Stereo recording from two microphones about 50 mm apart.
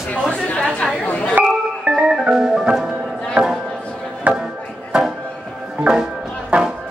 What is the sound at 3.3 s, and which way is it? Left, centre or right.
Chop, centre.